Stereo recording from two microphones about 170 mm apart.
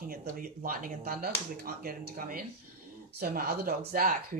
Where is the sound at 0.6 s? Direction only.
55° right (ahead or behind).